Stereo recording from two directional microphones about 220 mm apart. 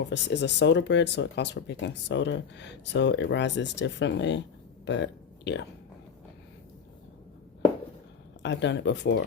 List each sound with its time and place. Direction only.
0.0 s speech: 50° left (ahead or behind)
8.4 s speech: 50° left (ahead or behind)